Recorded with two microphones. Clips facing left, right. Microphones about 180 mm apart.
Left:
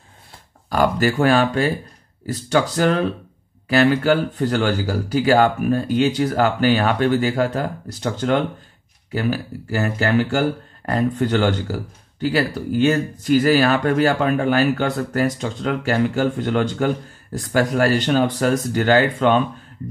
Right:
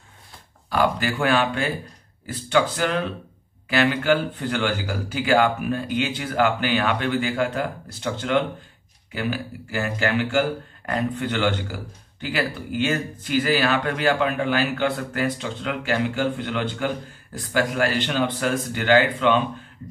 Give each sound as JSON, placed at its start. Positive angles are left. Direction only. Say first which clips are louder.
{"t": 0.7, "sound": "speech", "louder": "left 4 dB", "side_deg": 45}